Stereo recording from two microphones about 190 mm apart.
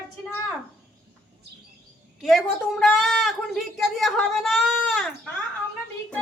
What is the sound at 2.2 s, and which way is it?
A woman's voice, centre (ahead or behind).